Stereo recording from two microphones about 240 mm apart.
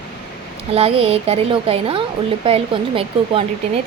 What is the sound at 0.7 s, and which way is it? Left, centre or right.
A woman's voice, right.